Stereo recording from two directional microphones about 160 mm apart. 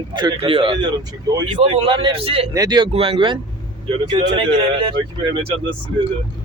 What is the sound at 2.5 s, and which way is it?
Speech, 25° right (ahead or behind).